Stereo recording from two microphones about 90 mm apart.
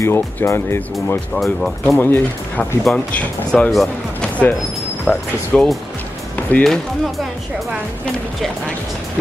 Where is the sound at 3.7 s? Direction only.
Centre (ahead or behind).